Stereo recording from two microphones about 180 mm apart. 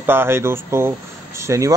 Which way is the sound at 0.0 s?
10° right (ahead or behind).